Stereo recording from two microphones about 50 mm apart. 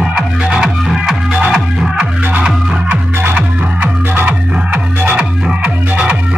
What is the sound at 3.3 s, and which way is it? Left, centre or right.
Music, right.